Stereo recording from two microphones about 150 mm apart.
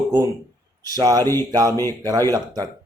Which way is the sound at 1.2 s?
15° left (ahead or behind).